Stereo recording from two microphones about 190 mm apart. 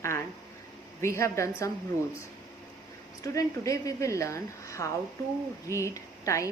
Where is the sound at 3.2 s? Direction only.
15° left (ahead or behind).